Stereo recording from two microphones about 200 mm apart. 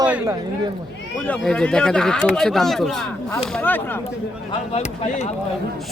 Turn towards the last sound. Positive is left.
turn(degrees=30)  # may be behind; listen again after turning